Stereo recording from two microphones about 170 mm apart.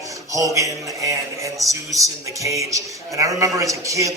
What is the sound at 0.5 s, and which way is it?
A man's voice, 20° right (ahead or behind).